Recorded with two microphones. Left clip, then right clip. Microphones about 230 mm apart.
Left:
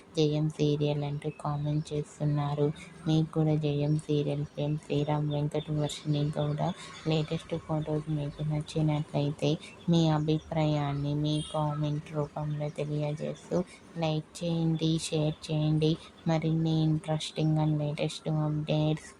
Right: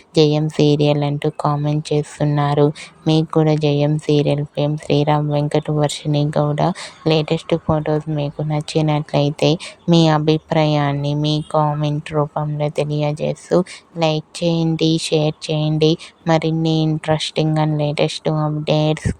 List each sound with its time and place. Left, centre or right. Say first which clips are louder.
0.1 s speech: right 14 dB; right